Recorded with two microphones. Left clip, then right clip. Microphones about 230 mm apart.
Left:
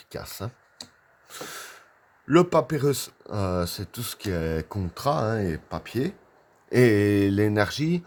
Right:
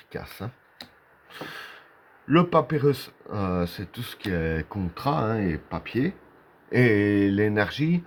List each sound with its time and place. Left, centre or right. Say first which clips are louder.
0.1 s speech: even; left
1.3 s snort: even; left
2.3 s speech: left 1 dB; left